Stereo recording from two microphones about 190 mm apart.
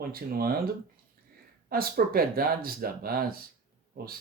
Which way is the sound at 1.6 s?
50° right (ahead or behind).